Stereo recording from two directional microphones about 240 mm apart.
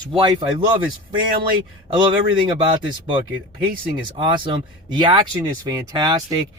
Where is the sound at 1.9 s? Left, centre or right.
Centre.